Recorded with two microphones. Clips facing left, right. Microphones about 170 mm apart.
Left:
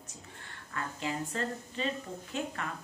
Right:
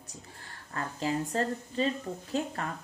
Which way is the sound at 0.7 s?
35° right (ahead or behind).